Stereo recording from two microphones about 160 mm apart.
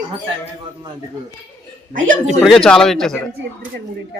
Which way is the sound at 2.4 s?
5° left (ahead or behind).